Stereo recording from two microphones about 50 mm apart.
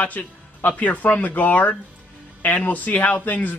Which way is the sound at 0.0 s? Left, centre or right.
Left.